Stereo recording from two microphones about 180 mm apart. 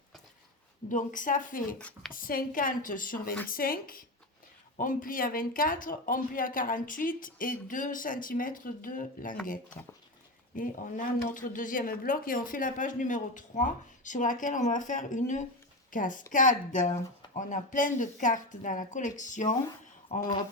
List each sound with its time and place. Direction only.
0.9 s speech: 45° left (ahead or behind)
10.5 s speech: 45° left (ahead or behind)
20.1 s speech: 60° left (ahead or behind)